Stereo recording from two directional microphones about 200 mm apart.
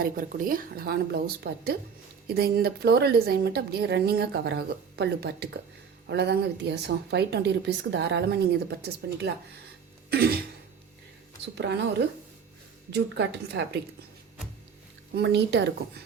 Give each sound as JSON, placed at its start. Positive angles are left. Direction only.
{"t": 0.0, "sound": "a woman's voice", "side_deg": -45}
{"t": 11.5, "sound": "a woman's voice", "side_deg": -60}
{"t": 15.1, "sound": "a woman's voice", "side_deg": -55}